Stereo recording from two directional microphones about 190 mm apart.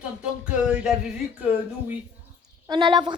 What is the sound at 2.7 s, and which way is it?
Speech, 25° right (ahead or behind).